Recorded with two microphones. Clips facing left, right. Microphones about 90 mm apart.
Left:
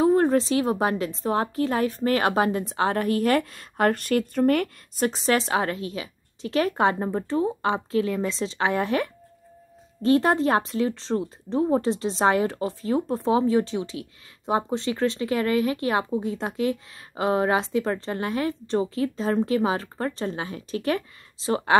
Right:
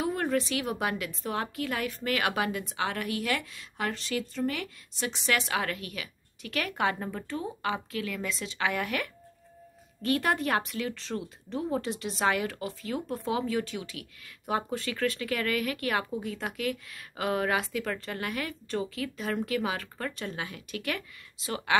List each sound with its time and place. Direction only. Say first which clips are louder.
0.0 s a woman's voice: left 9 dB; 35° left (ahead or behind)